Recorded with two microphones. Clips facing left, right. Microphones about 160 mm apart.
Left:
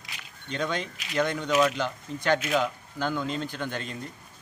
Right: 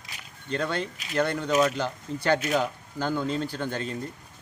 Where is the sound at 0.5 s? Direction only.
15° left (ahead or behind).